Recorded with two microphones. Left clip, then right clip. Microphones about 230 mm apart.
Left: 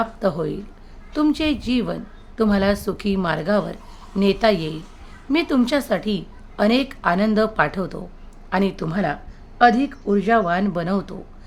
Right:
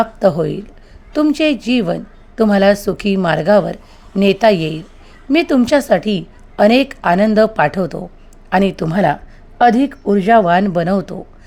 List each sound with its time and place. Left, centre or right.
0.0 s a woman's voice: right